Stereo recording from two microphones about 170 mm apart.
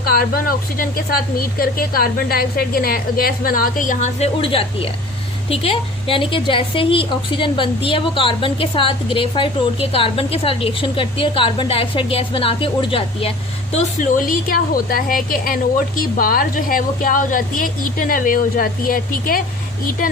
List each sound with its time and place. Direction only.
0.1 s a woman's voice: 60° left (ahead or behind)
4.4 s a woman's voice: 30° left (ahead or behind)
13.7 s a woman's voice: 50° left (ahead or behind)